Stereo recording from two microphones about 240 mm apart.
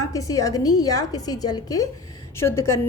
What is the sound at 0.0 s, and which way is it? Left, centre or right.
A woman's voice, centre.